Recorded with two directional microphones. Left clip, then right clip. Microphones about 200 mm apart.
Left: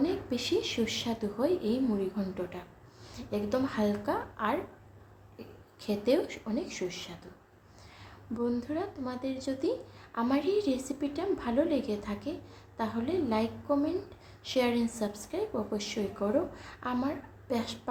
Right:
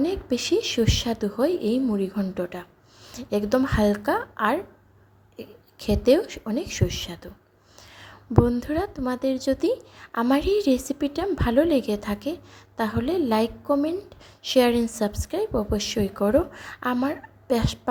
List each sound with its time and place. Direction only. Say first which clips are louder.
0.0 s a woman's voice: right 6 dB; 40° right (ahead or behind)
7.8 s a sound: right 7 dB; 40° right (ahead or behind)
8.6 s a woman's voice: right 9 dB; 40° right (ahead or behind)